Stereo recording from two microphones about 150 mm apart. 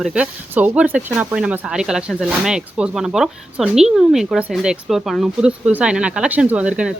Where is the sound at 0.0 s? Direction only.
5° right (ahead or behind).